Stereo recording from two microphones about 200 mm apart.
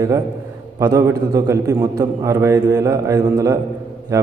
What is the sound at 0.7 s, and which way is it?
A man's voice, 15° right (ahead or behind).